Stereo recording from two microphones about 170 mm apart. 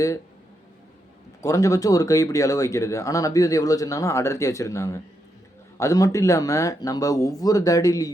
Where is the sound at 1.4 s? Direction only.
20° left (ahead or behind).